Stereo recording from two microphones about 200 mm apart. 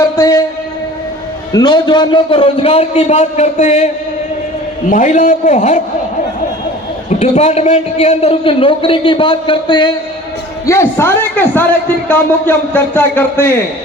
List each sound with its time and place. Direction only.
0.2 s a sound: 15° left (ahead or behind)
1.5 s a man's voice: 20° left (ahead or behind)
4.9 s a man's voice: 40° left (ahead or behind)
7.2 s a man's voice: 35° left (ahead or behind)
10.7 s a man's voice: 10° left (ahead or behind)